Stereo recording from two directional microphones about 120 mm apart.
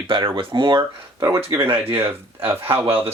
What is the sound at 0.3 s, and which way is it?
Speech, 40° right (ahead or behind).